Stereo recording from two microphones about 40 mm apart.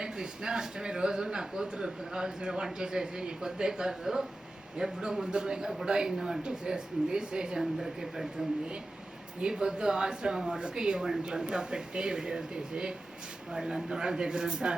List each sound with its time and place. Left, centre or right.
0.0 s a man's voice: centre
7.6 s a man's voice: centre
9.4 s speech: right